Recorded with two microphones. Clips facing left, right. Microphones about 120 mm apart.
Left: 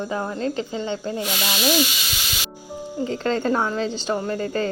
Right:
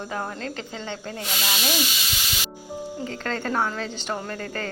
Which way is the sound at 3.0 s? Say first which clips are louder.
Left 8 dB; 25° left (ahead or behind).